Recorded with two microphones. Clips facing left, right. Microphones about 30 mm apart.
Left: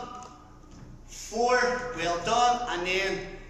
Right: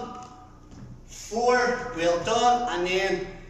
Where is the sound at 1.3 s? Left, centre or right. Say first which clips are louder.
Right 2 dB; centre.